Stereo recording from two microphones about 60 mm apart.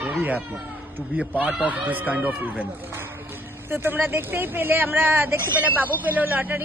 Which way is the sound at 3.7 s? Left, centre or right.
Right.